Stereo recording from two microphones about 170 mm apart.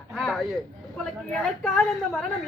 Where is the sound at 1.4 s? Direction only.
5° left (ahead or behind).